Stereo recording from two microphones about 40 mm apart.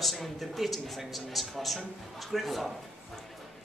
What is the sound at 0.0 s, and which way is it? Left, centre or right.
Music, centre.